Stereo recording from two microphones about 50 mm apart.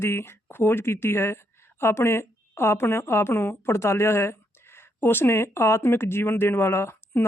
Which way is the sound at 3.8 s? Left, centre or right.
Left.